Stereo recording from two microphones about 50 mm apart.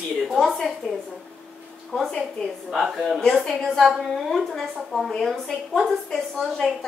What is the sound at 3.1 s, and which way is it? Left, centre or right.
A woman's voice, centre.